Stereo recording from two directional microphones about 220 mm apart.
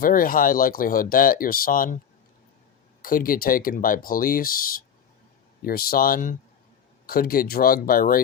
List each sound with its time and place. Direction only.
0.0 s speech: 40° left (ahead or behind)
3.0 s speech: 40° left (ahead or behind)